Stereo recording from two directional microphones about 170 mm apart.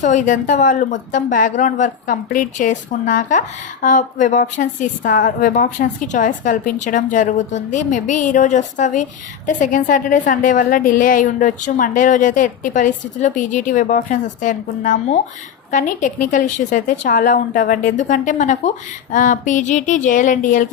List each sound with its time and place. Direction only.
0.0 s a woman's voice: 50° left (ahead or behind)